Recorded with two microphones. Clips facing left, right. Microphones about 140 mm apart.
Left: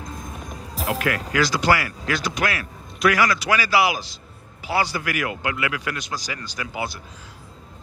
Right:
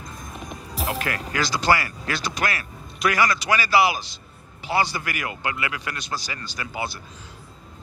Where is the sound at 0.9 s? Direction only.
90° left.